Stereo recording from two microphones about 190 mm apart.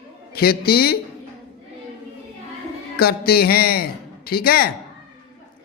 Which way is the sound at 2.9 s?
55° left (ahead or behind).